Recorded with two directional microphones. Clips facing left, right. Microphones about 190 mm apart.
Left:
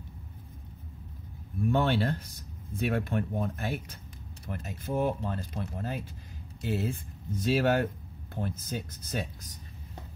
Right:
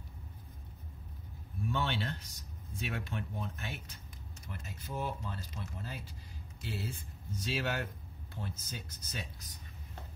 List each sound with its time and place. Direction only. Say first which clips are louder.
1.6 s speech: left 9 dB; 55° left (ahead or behind)